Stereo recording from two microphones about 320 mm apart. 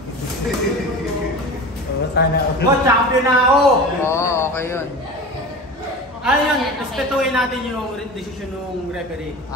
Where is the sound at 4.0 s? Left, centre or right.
Centre.